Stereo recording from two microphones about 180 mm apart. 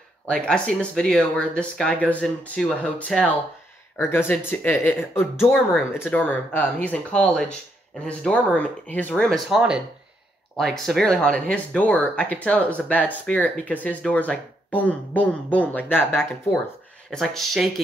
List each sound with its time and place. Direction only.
0.3 s speech: 5° left (ahead or behind)
5.4 s speech: centre (ahead or behind)
10.6 s speech: centre (ahead or behind)